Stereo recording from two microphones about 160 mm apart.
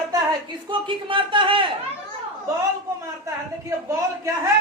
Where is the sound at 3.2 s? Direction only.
20° right (ahead or behind).